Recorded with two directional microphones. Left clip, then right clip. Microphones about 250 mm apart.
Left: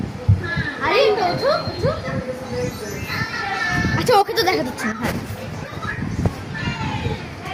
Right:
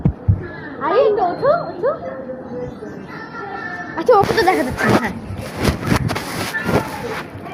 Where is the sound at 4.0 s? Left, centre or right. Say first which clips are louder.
Right 4 dB; left.